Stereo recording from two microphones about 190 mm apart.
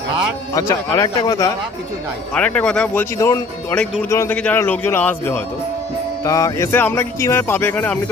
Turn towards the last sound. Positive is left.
turn(degrees=10)  # may be behind; listen again after turning